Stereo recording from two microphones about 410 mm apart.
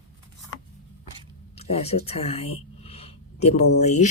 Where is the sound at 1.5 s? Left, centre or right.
Centre.